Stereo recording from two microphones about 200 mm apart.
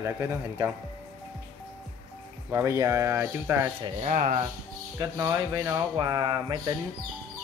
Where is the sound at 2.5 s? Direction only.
15° right (ahead or behind).